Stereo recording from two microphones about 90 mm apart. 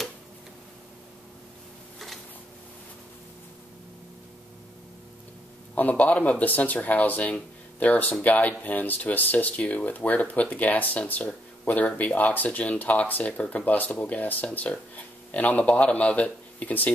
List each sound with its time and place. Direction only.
5.8 s speech: 20° left (ahead or behind)